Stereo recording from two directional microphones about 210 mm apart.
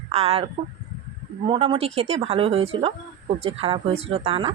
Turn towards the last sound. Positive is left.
turn(degrees=-30)  # may be behind; listen again after turning